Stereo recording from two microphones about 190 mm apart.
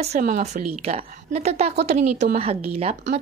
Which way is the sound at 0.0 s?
35° right (ahead or behind).